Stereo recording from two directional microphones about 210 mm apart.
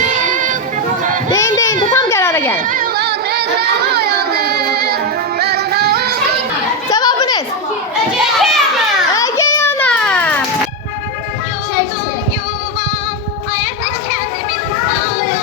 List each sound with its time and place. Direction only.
0.2 s music: 40° right (ahead or behind)
1.3 s children playing: 15° left (ahead or behind)
1.9 s baby cry: 15° left (ahead or behind)
2.6 s child singing: 40° right (ahead or behind)
5.4 s music: 50° right (ahead or behind)
6.9 s children playing: 20° left (ahead or behind)
8.4 s children playing: centre (ahead or behind)
9.1 s a sound: 15° left (ahead or behind)